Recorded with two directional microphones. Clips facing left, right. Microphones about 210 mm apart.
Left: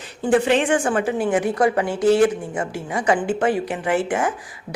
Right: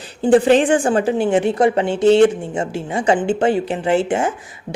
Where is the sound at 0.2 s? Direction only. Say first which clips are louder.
Right 5 dB; 30° right (ahead or behind).